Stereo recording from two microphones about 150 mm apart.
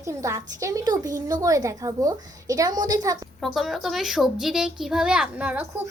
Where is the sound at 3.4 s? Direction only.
Centre (ahead or behind).